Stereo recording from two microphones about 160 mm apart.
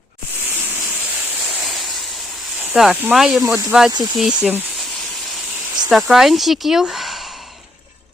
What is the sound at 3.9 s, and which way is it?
Speech, 25° right (ahead or behind).